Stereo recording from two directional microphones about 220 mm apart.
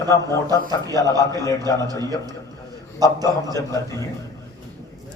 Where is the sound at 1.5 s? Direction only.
15° left (ahead or behind).